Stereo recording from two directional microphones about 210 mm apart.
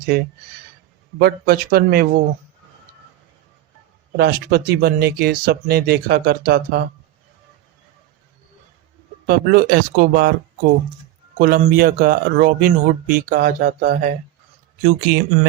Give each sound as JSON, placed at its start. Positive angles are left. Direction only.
{"t": 1.2, "sound": "speech", "side_deg": -45}
{"t": 4.2, "sound": "speech", "side_deg": -50}
{"t": 9.2, "sound": "speech", "side_deg": -45}
{"t": 11.3, "sound": "speech", "side_deg": -40}